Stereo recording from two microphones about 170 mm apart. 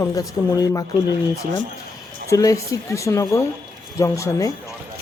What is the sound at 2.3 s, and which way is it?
Speech, 20° left (ahead or behind).